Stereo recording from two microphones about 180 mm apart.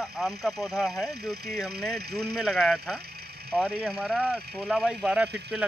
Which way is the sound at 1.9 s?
60° right (ahead or behind).